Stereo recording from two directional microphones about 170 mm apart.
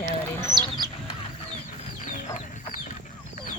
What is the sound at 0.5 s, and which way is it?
Chicken, 25° right (ahead or behind).